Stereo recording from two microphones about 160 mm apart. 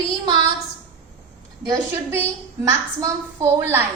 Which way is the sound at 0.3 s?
30° right (ahead or behind).